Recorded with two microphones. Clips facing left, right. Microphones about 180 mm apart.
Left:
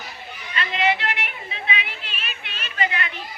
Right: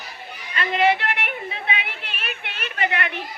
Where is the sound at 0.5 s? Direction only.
50° right (ahead or behind).